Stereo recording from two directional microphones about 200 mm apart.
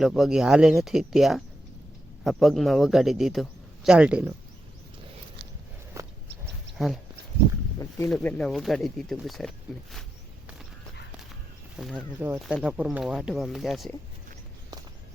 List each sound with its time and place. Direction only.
0.0 s speech: centre (ahead or behind)
6.0 s a sound: 15° right (ahead or behind)
6.7 s speech: centre (ahead or behind)
7.8 s speech: 15° left (ahead or behind)
11.8 s speech: centre (ahead or behind)